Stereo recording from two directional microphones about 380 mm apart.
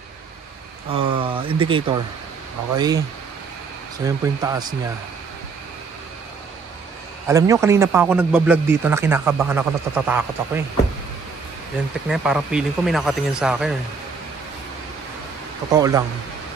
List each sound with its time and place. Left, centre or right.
0.9 s speech: centre
4.0 s speech: centre
7.2 s a man's voice: centre
12.1 s a man's voice: centre
15.7 s speech: centre